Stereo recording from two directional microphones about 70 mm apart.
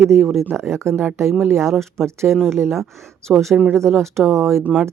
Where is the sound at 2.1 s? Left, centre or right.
Right.